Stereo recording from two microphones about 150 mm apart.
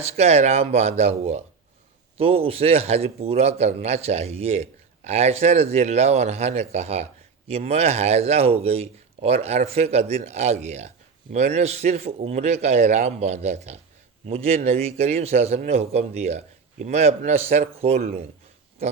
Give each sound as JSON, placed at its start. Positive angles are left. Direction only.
{"t": 0.0, "sound": "a man's voice", "side_deg": -45}